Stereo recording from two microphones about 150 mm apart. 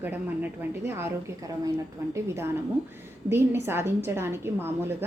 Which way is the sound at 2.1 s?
15° right (ahead or behind).